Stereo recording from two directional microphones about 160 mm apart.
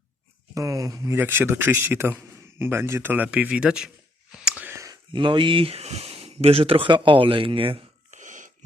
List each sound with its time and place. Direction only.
0.5 s a man's voice: 20° right (ahead or behind)
5.1 s speech: 30° right (ahead or behind)
8.1 s a sound: 50° right (ahead or behind)